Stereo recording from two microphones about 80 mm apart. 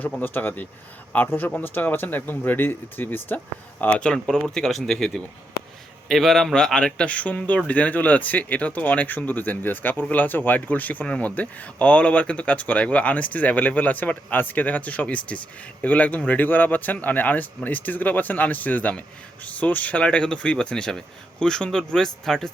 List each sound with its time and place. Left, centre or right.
0.2 s speech: left; by 22.4 s centre